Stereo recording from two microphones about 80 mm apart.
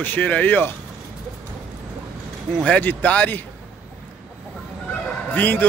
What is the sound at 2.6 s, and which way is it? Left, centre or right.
Speech, centre.